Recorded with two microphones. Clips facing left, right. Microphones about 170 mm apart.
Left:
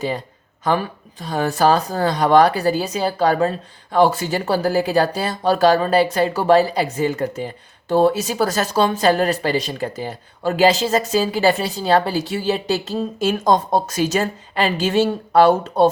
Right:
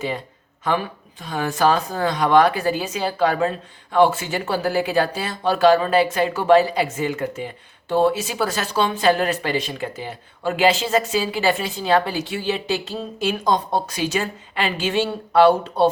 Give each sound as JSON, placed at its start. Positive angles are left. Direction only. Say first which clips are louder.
{"t": 0.6, "sound": "speech", "louder": "left 3 dB", "side_deg": 40}